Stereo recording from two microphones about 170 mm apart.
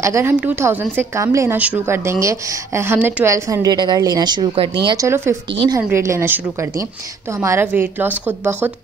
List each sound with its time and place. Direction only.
0.0 s a woman's voice: 15° right (ahead or behind)
5.5 s a woman's voice: 30° right (ahead or behind)
5.8 s a woman's voice: 15° right (ahead or behind)